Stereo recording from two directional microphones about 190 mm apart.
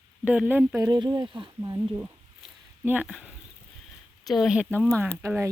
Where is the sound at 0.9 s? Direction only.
20° right (ahead or behind).